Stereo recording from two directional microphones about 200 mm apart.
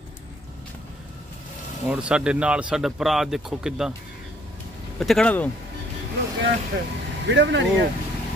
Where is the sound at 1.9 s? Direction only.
5° right (ahead or behind).